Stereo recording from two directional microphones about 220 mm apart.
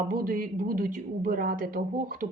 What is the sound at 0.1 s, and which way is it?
Speech, 40° right (ahead or behind).